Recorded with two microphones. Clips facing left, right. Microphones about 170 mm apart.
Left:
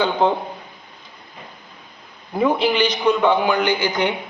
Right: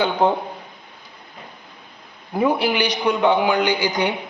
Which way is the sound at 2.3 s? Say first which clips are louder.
Left 1 dB; 10° right (ahead or behind).